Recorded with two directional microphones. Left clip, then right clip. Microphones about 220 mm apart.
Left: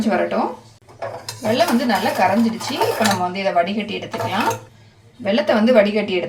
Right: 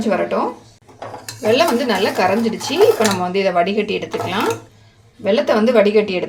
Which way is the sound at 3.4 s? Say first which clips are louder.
Right 3 dB; 35° right (ahead or behind).